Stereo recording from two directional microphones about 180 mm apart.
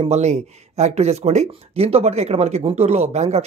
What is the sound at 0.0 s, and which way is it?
Speech, 40° right (ahead or behind).